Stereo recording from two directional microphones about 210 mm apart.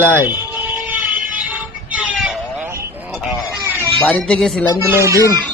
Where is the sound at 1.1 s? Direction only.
40° right (ahead or behind).